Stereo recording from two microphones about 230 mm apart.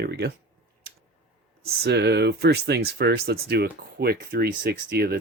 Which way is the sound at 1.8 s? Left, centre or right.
Right.